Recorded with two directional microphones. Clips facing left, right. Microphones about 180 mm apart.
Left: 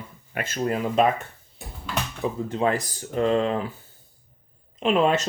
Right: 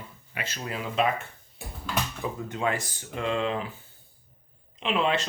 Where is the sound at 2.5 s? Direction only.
35° left (ahead or behind).